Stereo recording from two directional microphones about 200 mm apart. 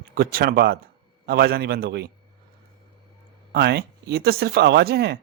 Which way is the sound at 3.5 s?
55° right (ahead or behind).